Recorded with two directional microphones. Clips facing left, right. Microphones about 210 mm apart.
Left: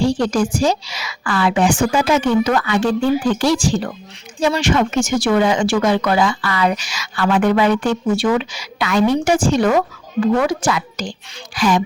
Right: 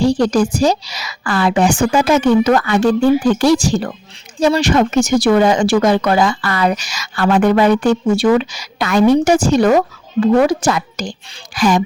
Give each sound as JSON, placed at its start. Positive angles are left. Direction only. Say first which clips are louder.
{"t": 0.0, "sound": "a woman's voice", "louder": "right 3 dB", "side_deg": -40}